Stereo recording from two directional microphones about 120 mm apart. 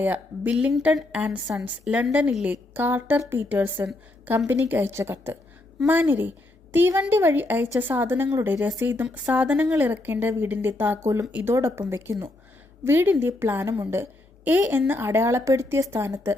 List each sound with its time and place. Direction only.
0.0 s a woman's voice: 15° right (ahead or behind)
11.3 s a woman's voice: 10° right (ahead or behind)
11.5 s a woman's voice: 20° right (ahead or behind)